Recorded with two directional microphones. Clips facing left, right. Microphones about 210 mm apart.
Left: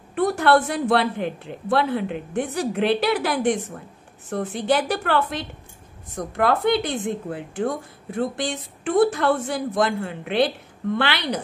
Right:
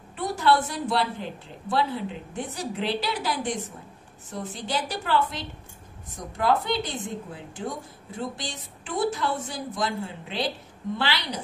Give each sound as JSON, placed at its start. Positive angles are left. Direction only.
{"t": 0.1, "sound": "a woman's voice", "side_deg": 60}